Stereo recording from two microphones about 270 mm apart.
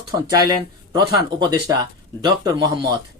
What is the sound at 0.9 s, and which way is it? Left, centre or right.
Speech, centre.